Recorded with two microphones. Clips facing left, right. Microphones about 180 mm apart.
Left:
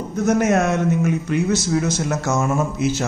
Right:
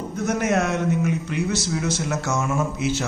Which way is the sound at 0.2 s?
45° left (ahead or behind).